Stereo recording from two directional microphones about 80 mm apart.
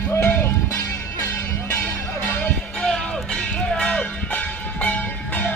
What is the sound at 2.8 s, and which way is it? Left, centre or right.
Church bell, centre.